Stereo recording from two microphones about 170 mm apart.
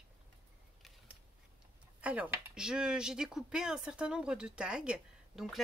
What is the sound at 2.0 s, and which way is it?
Speech, 10° right (ahead or behind).